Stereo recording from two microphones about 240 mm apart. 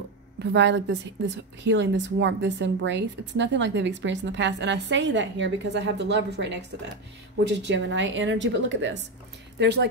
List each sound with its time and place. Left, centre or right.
0.4 s a woman's voice: right